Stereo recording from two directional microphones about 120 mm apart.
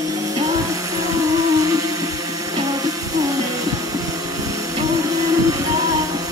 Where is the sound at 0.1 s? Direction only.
30° right (ahead or behind).